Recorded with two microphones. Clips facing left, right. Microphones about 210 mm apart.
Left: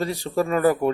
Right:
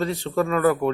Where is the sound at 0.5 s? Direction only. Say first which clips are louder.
Left 1 dB; 35° left (ahead or behind).